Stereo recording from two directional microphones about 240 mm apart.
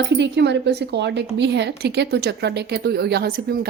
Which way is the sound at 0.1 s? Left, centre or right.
Right.